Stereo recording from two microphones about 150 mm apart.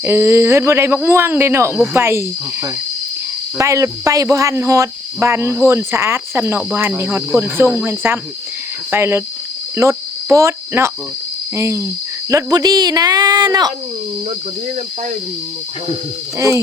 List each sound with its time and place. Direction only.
0.0 s speech: 15° right (ahead or behind)
9.7 s cricket: 20° right (ahead or behind)
11.5 s speech: 20° right (ahead or behind)